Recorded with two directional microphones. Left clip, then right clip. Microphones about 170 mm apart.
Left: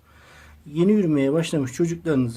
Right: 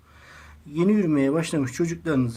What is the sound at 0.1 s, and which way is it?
Speech, 25° left (ahead or behind).